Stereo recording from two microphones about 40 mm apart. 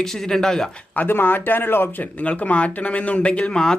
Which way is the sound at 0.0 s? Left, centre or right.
Centre.